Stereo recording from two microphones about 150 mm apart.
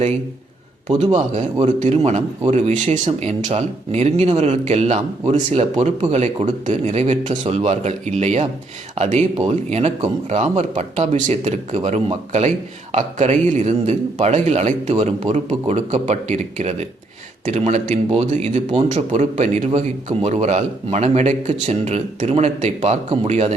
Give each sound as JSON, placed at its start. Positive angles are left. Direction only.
{"t": 1.1, "sound": "speech", "side_deg": -45}